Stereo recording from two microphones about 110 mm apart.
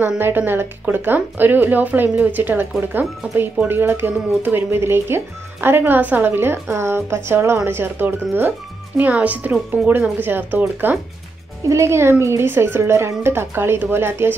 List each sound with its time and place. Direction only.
0.2 s a woman's voice: 20° right (ahead or behind)